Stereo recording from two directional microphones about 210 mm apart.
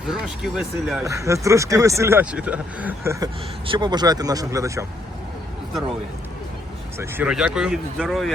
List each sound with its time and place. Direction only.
0.1 s speech: 5° right (ahead or behind)
1.0 s speech: 15° right (ahead or behind)
7.0 s speech: 5° right (ahead or behind)